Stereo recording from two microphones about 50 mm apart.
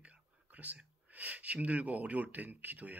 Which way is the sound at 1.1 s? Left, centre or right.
Right.